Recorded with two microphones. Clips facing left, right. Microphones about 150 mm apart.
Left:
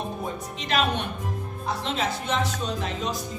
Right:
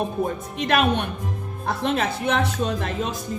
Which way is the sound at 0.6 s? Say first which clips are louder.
Right 5 dB; 55° right (ahead or behind).